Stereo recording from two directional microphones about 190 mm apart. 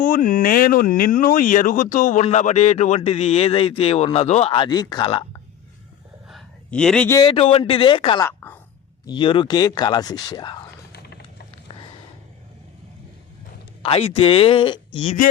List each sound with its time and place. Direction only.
0.0 s speech: 45° left (ahead or behind); by 5.2 s 25° left (ahead or behind)
6.2 s a sound: centre (ahead or behind)
7.2 s speech: 25° left (ahead or behind)
8.3 s speech: 15° left (ahead or behind)
9.0 s speech: 25° left (ahead or behind)
13.8 s speech: 30° left (ahead or behind)